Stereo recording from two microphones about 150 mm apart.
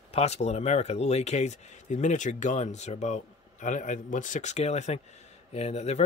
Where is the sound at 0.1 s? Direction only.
45° left (ahead or behind).